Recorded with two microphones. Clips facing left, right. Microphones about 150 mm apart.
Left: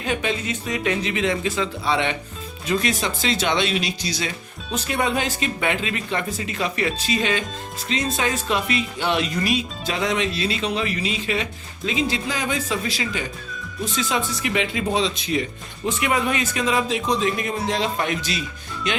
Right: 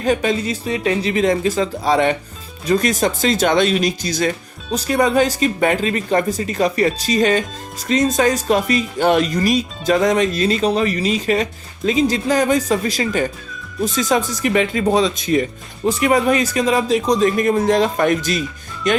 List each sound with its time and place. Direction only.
0.0 s speech: 40° right (ahead or behind)